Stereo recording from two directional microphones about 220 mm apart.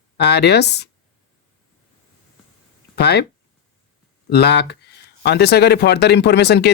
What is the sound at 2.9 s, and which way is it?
Speech, 50° left (ahead or behind).